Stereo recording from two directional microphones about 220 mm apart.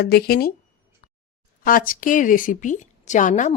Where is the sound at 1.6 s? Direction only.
40° left (ahead or behind).